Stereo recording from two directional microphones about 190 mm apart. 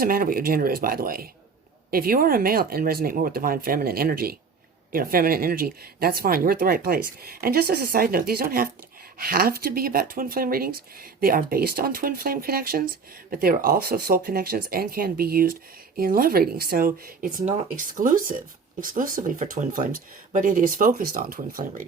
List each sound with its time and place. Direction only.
0.0 s speech: 50° right (ahead or behind)